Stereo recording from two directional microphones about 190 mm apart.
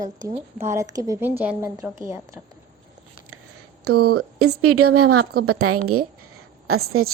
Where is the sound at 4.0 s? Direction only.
55° right (ahead or behind).